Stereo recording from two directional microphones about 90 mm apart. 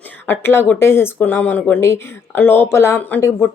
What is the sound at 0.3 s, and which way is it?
Speech, 25° left (ahead or behind).